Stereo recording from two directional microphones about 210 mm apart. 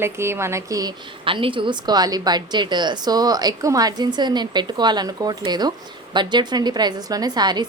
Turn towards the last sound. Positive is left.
turn(degrees=-20)  # may be behind; listen again after turning